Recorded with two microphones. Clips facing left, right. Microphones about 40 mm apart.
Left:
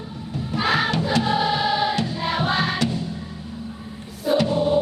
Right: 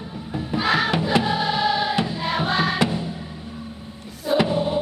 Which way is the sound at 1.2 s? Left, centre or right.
Centre.